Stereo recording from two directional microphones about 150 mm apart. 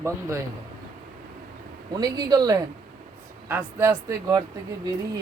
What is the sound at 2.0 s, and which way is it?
Speech, 25° right (ahead or behind).